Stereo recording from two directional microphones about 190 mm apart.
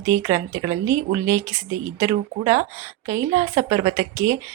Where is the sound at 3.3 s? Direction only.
35° right (ahead or behind).